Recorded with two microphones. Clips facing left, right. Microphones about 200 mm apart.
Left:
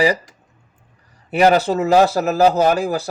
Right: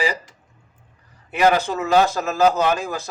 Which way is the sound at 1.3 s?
35° left (ahead or behind).